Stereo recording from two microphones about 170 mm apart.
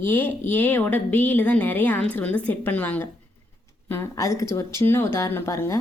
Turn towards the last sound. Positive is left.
turn(degrees=15)  # may be behind; listen again after turning